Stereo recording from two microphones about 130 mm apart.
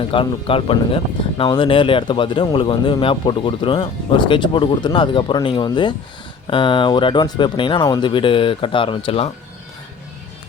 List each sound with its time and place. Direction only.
0.1 s speech: 45° left (ahead or behind)